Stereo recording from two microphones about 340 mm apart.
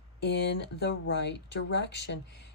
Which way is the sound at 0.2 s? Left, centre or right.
Left.